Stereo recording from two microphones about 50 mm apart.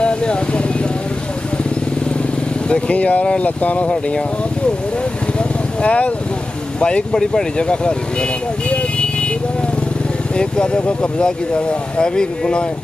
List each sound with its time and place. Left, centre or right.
0.0 s vehicle: left
2.7 s speech: left
5.8 s speech: left
10.3 s speech: centre